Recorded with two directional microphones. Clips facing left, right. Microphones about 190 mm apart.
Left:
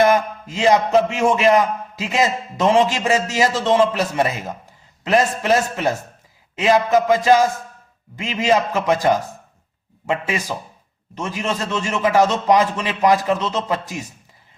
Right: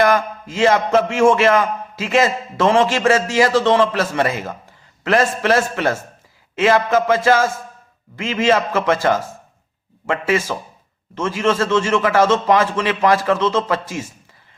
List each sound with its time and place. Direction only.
0.0 s a man's voice: 20° left (ahead or behind)